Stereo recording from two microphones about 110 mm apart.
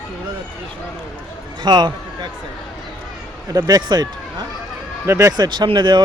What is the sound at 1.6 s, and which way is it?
Speech, 40° right (ahead or behind).